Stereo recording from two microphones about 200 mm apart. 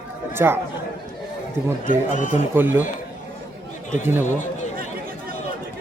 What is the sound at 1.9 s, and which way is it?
Speech, 40° left (ahead or behind).